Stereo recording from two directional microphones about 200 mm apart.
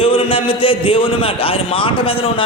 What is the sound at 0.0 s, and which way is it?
A man's voice, 25° left (ahead or behind).